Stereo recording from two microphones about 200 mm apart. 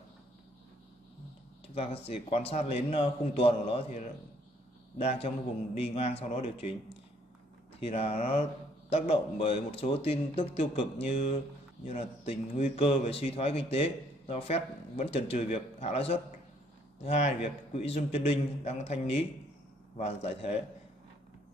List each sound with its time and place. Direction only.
2.0 s a man's voice: 30° left (ahead or behind)
7.8 s a man's voice: 30° left (ahead or behind)